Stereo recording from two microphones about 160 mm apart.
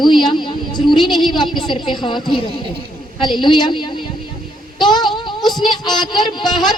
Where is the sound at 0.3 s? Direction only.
30° left (ahead or behind).